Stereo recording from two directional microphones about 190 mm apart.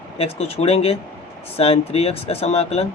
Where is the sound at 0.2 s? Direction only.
30° left (ahead or behind).